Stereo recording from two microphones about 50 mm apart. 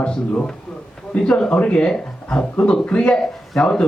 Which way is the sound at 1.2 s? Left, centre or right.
Centre.